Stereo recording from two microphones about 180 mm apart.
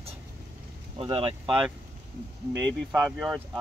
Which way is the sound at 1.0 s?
30° right (ahead or behind).